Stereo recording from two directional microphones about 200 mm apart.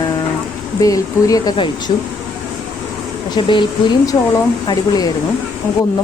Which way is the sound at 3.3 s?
25° left (ahead or behind).